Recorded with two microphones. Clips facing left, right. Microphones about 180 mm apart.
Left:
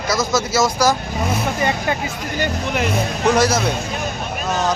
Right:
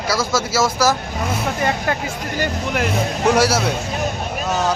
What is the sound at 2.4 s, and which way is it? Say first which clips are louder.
Speech: even; 5° right (ahead or behind).